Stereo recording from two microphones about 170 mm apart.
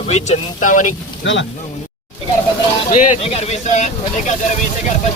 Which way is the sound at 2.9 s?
45° left (ahead or behind).